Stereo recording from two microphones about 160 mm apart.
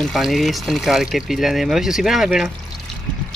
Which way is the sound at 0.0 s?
Centre (ahead or behind).